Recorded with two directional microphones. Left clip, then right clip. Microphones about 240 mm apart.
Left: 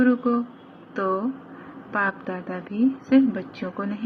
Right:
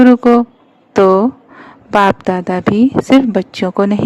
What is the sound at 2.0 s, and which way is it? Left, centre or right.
A woman's voice, right.